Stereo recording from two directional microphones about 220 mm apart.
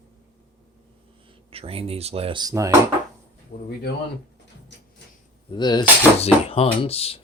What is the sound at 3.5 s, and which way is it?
Speech, 40° left (ahead or behind).